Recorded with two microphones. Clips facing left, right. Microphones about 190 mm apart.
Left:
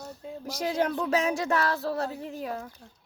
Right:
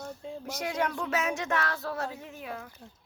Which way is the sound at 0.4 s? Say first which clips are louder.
Left 4 dB; 30° left (ahead or behind).